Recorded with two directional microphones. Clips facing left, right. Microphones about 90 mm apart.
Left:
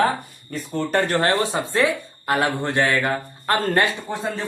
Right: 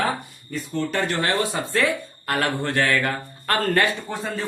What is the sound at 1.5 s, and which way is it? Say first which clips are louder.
Speech: left 2 dB; 20° left (ahead or behind).